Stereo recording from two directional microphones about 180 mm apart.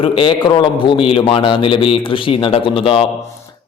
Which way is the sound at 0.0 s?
30° left (ahead or behind).